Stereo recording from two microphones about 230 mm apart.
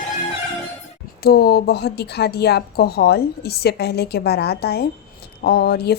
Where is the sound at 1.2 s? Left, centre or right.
Left.